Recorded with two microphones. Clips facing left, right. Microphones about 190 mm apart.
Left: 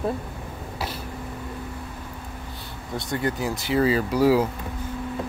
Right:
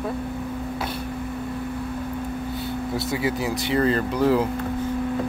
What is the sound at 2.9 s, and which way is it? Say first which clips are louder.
Speech: even; 5° right (ahead or behind).